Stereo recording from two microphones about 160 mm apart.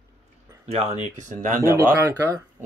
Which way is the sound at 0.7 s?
45° right (ahead or behind).